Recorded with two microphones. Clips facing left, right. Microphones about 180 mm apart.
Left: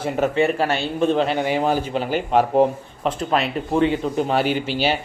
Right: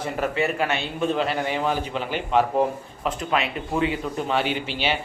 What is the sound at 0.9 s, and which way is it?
Speech, centre (ahead or behind).